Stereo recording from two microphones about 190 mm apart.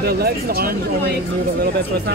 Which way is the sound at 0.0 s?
55° right (ahead or behind).